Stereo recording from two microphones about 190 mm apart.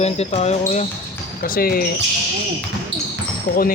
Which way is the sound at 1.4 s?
50° left (ahead or behind).